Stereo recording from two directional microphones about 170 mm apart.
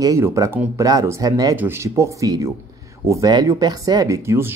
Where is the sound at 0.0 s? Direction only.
20° right (ahead or behind).